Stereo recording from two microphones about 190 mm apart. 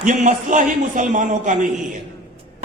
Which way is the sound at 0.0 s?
40° right (ahead or behind).